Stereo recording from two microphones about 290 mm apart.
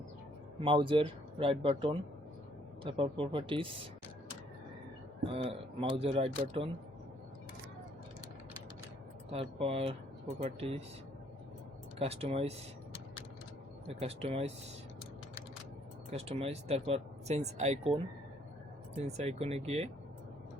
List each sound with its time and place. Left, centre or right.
0.6 s speech: centre
5.3 s speech: centre
9.3 s speech: centre
11.9 s speech: right
13.8 s speech: right
16.1 s speech: right
19.0 s speech: right